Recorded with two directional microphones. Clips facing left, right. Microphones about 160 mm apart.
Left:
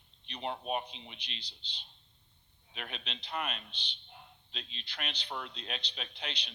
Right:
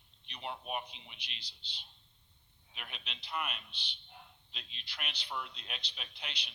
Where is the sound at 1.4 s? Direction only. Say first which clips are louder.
Left 3 dB; 10° right (ahead or behind).